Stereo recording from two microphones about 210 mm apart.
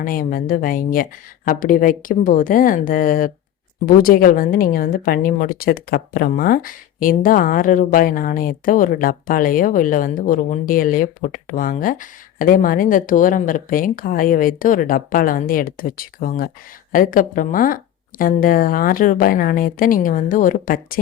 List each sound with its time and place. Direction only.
0.0 s a woman's voice: 40° left (ahead or behind)